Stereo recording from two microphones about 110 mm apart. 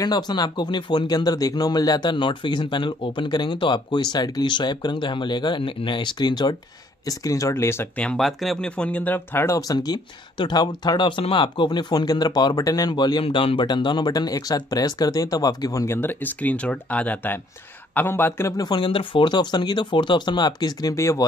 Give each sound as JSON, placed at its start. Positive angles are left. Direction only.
{"t": 0.0, "sound": "speech", "side_deg": 40}
{"t": 7.1, "sound": "speech", "side_deg": 30}
{"t": 7.9, "sound": "speech", "side_deg": 10}
{"t": 8.2, "sound": "speech", "side_deg": 0}
{"t": 9.6, "sound": "speech", "side_deg": 35}
{"t": 13.2, "sound": "speech", "side_deg": 55}
{"t": 18.6, "sound": "speech", "side_deg": 45}
{"t": 20.9, "sound": "speech", "side_deg": 25}